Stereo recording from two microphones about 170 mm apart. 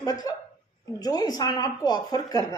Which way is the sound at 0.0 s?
20° left (ahead or behind).